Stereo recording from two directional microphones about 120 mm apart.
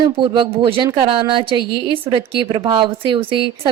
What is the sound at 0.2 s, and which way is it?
A woman's voice, 45° right (ahead or behind).